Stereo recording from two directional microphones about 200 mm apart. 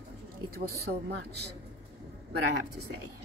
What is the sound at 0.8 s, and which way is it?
Speech, 55° right (ahead or behind).